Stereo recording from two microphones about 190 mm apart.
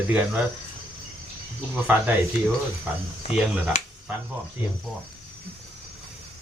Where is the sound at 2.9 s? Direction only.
10° right (ahead or behind).